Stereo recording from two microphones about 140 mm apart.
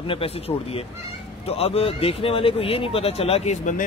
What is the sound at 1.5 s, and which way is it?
Speech, 45° left (ahead or behind).